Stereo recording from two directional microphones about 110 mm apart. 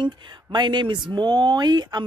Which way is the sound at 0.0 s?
45° right (ahead or behind).